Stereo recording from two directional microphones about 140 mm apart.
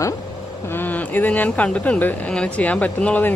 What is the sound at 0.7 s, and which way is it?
Speech, 15° left (ahead or behind).